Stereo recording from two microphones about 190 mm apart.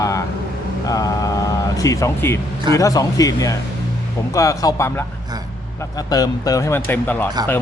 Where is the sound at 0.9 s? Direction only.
20° left (ahead or behind).